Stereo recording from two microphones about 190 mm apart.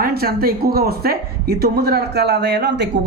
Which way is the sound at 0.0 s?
55° right (ahead or behind).